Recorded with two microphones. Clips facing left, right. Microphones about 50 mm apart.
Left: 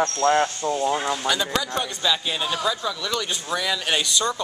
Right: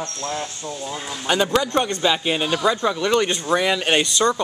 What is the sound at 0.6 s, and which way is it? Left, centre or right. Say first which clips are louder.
Speech: left 7 dB; left.